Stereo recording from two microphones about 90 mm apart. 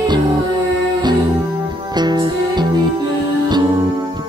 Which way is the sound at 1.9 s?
55° right (ahead or behind).